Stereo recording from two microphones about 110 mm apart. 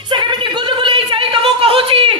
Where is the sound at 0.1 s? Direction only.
45° right (ahead or behind).